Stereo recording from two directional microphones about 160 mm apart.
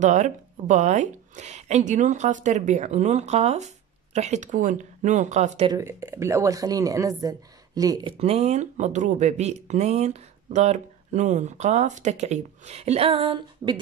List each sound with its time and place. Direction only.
0.0 s a woman's voice: 50° right (ahead or behind)
5.7 s a woman's voice: 20° right (ahead or behind)